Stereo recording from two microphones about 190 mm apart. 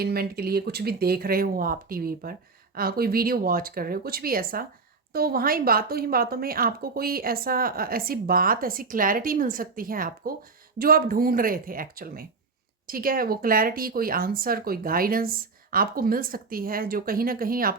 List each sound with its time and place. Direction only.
0.0 s speech: 55° right (ahead or behind)